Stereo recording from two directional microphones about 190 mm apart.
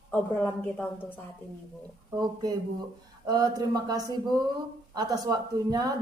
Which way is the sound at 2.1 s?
20° right (ahead or behind).